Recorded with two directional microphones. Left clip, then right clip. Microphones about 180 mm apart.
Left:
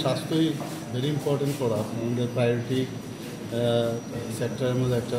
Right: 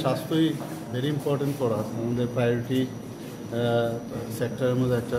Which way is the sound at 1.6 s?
Centre (ahead or behind).